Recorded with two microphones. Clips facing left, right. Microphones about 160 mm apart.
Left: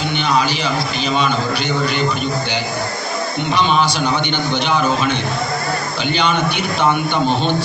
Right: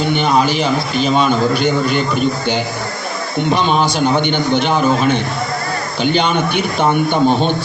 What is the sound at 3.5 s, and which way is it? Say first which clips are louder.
A man's voice: right 1 dB; 45° right (ahead or behind).